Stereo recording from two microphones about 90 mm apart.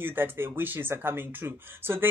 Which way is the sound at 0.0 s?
25° right (ahead or behind).